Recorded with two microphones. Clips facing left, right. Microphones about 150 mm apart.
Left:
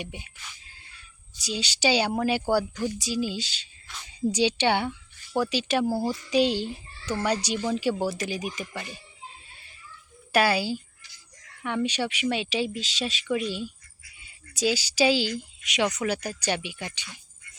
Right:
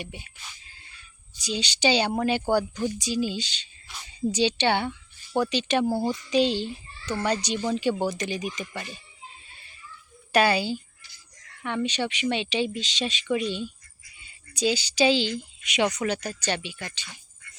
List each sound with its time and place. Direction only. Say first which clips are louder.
0.0 s a child's voice: left 1 dB; 15° left (ahead or behind)
1.4 s a child's voice: right 1 dB; 5° left (ahead or behind)
10.3 s a child's voice: right 1 dB; 5° left (ahead or behind)